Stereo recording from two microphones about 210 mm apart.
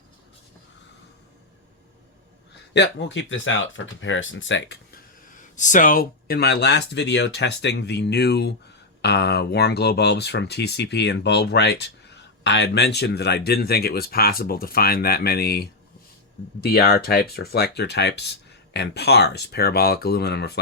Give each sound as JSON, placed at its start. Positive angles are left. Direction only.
{"t": 2.7, "sound": "speech", "side_deg": 55}
{"t": 5.3, "sound": "speech", "side_deg": 35}